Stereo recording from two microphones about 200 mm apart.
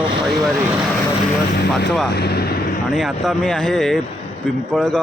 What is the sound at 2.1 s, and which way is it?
Speech, 55° left (ahead or behind).